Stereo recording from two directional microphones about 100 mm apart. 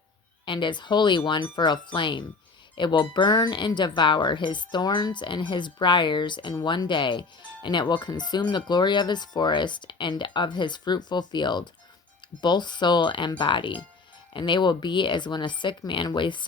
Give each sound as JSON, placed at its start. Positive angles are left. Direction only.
{"t": 0.4, "sound": "speech", "side_deg": 55}